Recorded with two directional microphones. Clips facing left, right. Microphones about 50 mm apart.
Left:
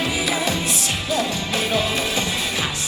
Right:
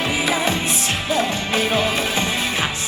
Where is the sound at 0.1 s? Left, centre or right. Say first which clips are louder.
Right 2 dB; right.